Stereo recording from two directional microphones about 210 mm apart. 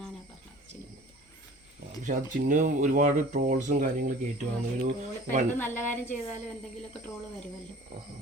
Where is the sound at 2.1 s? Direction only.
40° right (ahead or behind).